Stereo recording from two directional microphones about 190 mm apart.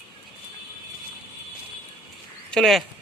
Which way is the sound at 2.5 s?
Centre (ahead or behind).